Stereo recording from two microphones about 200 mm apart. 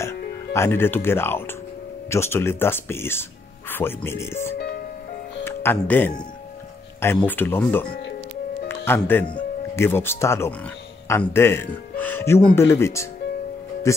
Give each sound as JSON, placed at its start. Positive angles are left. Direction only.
{"t": 0.5, "sound": "speech", "side_deg": 10}
{"t": 4.6, "sound": "music", "side_deg": 50}
{"t": 5.4, "sound": "speech", "side_deg": 10}
{"t": 7.8, "sound": "speech", "side_deg": 50}
{"t": 8.6, "sound": "music", "side_deg": 10}
{"t": 9.8, "sound": "speech", "side_deg": 10}